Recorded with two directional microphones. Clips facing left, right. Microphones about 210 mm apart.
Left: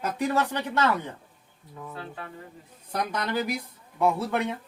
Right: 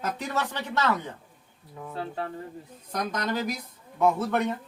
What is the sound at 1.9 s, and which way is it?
Speech, 35° right (ahead or behind).